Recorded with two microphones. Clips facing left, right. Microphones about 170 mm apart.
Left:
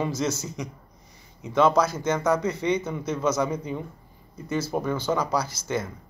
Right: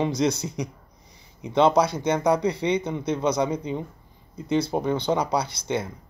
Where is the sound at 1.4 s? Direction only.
20° right (ahead or behind).